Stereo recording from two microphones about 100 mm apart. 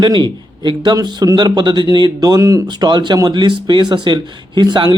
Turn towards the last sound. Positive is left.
turn(degrees=-50)  # may be behind; listen again after turning